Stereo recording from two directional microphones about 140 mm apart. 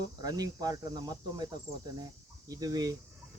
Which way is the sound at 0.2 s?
25° right (ahead or behind).